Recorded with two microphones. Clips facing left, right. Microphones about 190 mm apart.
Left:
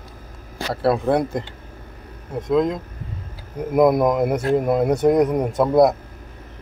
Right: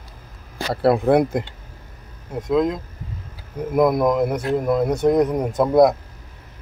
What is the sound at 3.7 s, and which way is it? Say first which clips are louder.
A man's voice: left 1 dB; 5° left (ahead or behind).